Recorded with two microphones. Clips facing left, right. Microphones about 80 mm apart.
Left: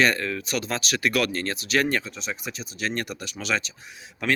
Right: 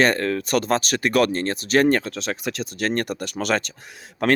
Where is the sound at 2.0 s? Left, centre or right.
Right.